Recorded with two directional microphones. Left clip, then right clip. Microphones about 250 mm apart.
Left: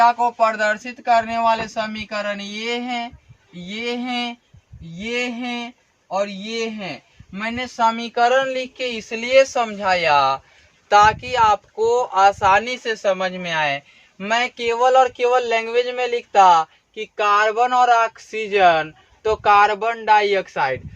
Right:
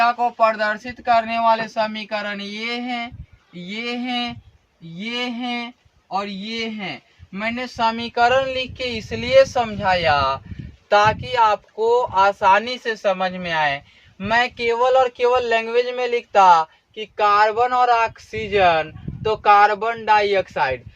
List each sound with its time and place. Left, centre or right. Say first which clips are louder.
0.0 s speech: left 1 dB; centre